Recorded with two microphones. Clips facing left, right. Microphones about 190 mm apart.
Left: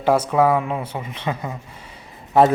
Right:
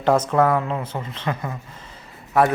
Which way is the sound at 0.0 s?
10° left (ahead or behind).